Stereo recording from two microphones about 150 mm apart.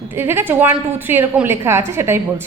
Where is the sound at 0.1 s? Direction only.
15° right (ahead or behind).